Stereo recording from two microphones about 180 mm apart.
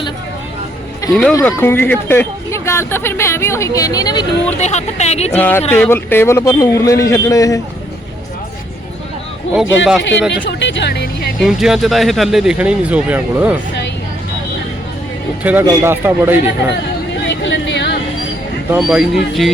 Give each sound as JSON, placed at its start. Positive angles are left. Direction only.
{"t": 1.1, "sound": "speech", "side_deg": 0}
{"t": 1.5, "sound": "speech", "side_deg": 10}
{"t": 4.5, "sound": "speech", "side_deg": 40}
{"t": 5.3, "sound": "speech", "side_deg": 10}
{"t": 9.6, "sound": "speech", "side_deg": -5}
{"t": 10.0, "sound": "speech", "side_deg": 80}
{"t": 11.3, "sound": "speech", "side_deg": 0}
{"t": 15.6, "sound": "a man's voice", "side_deg": -15}
{"t": 17.2, "sound": "a sound", "side_deg": 90}
{"t": 18.8, "sound": "speech", "side_deg": 0}